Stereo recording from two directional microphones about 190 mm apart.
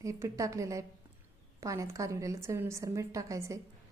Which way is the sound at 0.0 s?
15° right (ahead or behind).